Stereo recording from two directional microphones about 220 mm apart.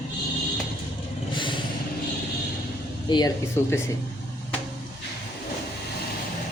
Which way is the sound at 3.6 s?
10° left (ahead or behind).